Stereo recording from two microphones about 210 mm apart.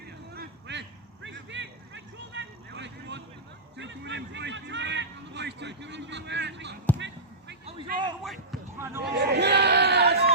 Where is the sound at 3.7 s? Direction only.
55° right (ahead or behind).